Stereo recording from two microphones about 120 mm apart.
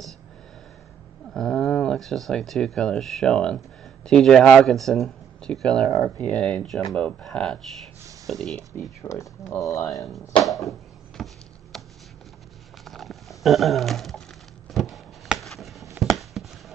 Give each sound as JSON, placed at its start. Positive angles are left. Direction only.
{"t": 1.3, "sound": "speech", "side_deg": 5}
{"t": 9.0, "sound": "speech", "side_deg": 25}
{"t": 10.0, "sound": "chopping", "side_deg": 0}
{"t": 11.7, "sound": "a sound", "side_deg": 0}